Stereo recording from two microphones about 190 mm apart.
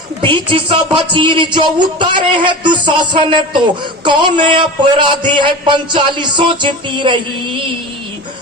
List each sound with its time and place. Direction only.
0.2 s a man's voice: 25° right (ahead or behind)